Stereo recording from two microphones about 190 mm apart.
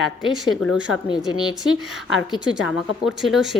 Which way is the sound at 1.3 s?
25° left (ahead or behind).